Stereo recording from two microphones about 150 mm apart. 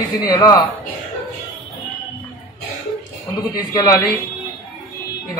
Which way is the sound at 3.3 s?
25° left (ahead or behind).